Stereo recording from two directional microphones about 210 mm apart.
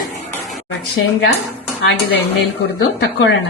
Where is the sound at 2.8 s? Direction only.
65° left (ahead or behind).